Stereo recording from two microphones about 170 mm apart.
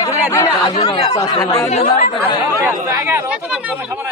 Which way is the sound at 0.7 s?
35° left (ahead or behind).